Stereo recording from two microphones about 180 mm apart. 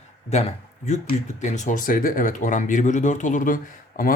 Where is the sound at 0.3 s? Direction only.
40° left (ahead or behind).